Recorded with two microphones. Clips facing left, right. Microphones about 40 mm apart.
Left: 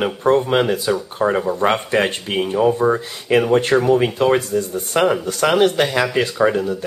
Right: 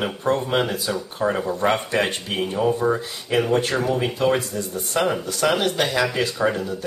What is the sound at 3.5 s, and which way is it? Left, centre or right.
Speech, left.